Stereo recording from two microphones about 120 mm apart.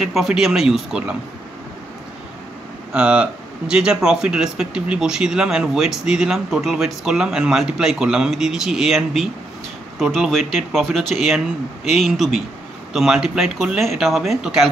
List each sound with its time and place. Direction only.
0.0 s speech: 5° right (ahead or behind)
2.9 s speech: 10° right (ahead or behind)